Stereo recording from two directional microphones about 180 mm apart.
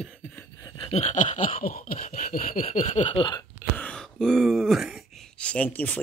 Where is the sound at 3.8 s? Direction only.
5° left (ahead or behind).